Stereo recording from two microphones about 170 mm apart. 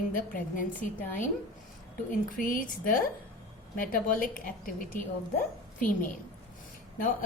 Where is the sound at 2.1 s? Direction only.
55° left (ahead or behind).